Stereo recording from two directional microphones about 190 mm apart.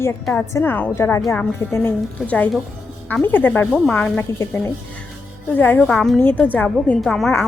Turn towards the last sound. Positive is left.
turn(degrees=0)  # may be behind; listen again after turning